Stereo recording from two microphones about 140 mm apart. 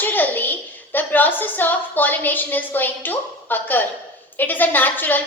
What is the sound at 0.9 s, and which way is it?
A woman's voice, 15° left (ahead or behind).